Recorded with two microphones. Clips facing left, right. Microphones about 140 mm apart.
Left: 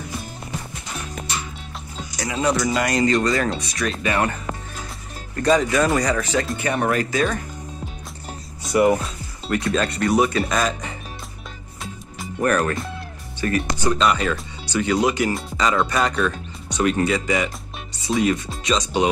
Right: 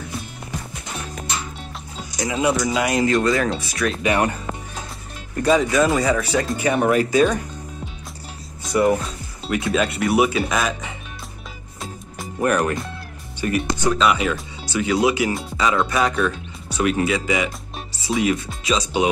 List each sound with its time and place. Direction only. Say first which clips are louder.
2.3 s speech: even; 5° right (ahead or behind)
4.0 s speech: right 2 dB; 15° right (ahead or behind)
5.3 s speech: right 1 dB; 5° right (ahead or behind)
8.7 s speech: left 1 dB; 15° left (ahead or behind)
9.0 s speech: right 1 dB; centre (ahead or behind)
12.4 s speech: even; 15° right (ahead or behind)